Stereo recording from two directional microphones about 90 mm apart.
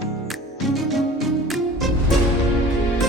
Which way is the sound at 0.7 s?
Centre (ahead or behind).